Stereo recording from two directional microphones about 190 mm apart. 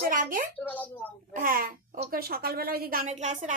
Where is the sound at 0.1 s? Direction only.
45° right (ahead or behind).